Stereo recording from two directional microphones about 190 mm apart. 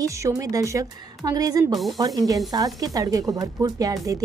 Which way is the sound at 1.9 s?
20° right (ahead or behind).